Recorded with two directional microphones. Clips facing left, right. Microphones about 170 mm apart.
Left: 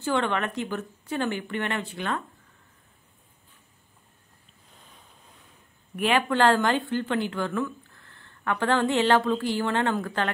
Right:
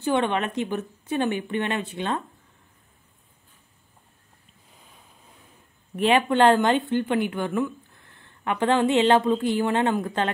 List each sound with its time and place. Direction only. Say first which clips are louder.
0.0 s speech: right 3 dB; 20° right (ahead or behind)
4.7 s boat: even; 5° right (ahead or behind)
5.9 s speech: right 4 dB; 20° right (ahead or behind)